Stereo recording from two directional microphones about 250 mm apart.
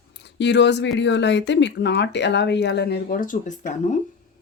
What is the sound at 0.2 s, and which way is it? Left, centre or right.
Speech, left.